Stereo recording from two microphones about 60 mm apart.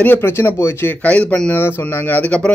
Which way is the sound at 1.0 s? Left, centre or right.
Left.